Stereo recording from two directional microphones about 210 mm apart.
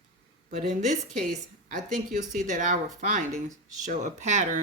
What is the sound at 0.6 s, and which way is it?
Speech, 35° right (ahead or behind).